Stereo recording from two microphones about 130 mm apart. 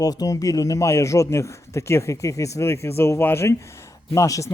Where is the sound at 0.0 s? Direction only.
30° left (ahead or behind).